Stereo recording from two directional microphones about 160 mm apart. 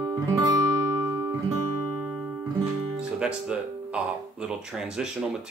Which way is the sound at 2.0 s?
10° right (ahead or behind).